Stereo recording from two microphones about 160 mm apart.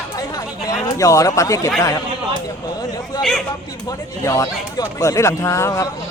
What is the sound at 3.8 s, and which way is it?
Speech, 20° left (ahead or behind).